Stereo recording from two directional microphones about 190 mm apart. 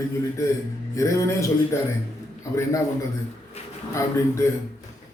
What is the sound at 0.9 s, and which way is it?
Speech, 15° left (ahead or behind).